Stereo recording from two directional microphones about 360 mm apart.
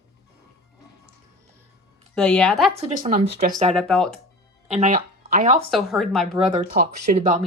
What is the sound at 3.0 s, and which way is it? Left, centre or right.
Speech, right.